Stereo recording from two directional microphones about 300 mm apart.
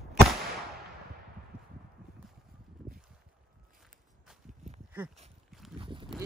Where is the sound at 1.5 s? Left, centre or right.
Centre.